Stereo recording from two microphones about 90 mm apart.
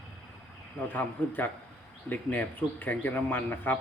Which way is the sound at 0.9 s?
20° left (ahead or behind).